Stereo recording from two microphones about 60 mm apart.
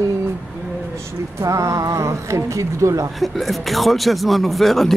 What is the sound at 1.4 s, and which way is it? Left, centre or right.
Speech, right.